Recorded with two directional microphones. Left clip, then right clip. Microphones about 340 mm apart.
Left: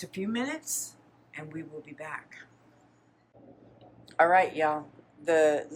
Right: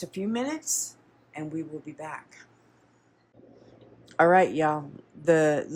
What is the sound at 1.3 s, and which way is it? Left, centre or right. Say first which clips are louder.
A man's voice: right 5 dB; centre.